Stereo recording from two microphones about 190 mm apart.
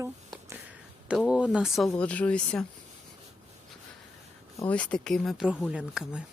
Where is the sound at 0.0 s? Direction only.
15° right (ahead or behind).